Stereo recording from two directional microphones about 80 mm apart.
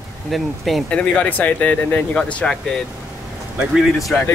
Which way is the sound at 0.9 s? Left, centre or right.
Centre.